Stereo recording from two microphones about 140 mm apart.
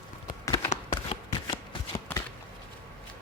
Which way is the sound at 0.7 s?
50° left (ahead or behind).